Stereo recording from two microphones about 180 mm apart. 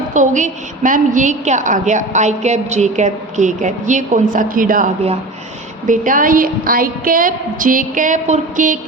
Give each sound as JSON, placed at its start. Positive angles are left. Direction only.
{"t": 0.1, "sound": "a woman's voice", "side_deg": -45}
{"t": 5.9, "sound": "a woman's voice", "side_deg": -50}